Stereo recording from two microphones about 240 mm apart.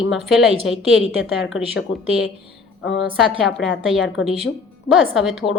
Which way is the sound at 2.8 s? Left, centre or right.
Left.